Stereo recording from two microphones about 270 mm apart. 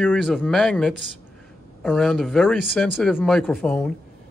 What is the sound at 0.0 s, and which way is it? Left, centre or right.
Speech, centre.